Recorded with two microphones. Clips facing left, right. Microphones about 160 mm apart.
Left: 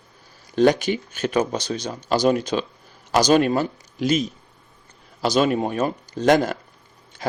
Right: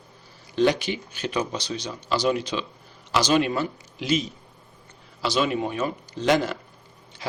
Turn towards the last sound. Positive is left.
turn(degrees=45)  # may be behind; listen again after turning